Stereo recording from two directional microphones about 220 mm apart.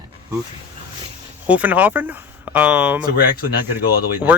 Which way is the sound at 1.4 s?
5° right (ahead or behind).